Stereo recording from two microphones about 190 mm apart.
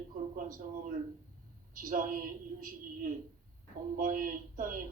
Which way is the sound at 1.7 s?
45° right (ahead or behind).